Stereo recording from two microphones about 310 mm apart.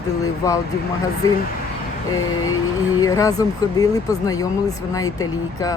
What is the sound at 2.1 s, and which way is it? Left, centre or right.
Speech, left.